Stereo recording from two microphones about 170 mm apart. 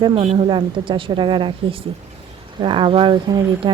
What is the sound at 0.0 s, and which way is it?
Speech, 30° right (ahead or behind).